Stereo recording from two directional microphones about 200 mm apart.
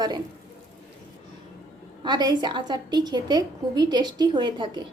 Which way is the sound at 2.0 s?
20° right (ahead or behind).